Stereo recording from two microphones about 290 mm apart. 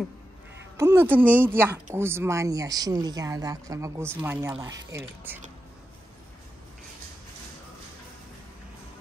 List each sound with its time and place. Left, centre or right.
0.7 s speech: centre